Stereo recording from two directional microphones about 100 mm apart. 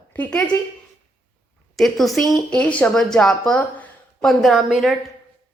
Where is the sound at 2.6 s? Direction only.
15° left (ahead or behind).